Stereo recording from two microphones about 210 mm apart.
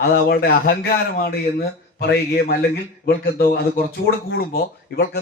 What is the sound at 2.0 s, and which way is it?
A man's voice, 50° left (ahead or behind).